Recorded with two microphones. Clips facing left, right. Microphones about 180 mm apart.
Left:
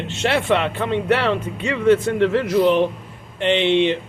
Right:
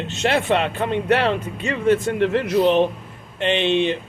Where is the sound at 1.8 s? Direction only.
15° right (ahead or behind).